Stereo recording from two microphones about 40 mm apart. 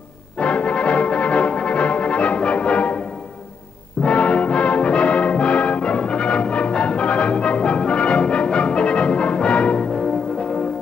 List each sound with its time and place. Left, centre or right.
0.4 s music: left
4.0 s brass instrument: left